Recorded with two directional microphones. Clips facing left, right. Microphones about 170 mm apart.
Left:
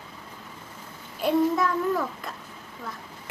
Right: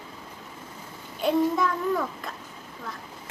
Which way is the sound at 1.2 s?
Centre (ahead or behind).